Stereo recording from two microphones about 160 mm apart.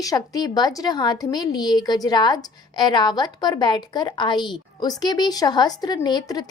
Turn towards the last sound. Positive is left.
turn(degrees=25)  # may be behind; listen again after turning